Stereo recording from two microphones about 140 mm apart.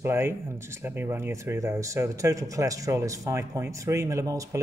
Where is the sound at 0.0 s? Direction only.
15° right (ahead or behind).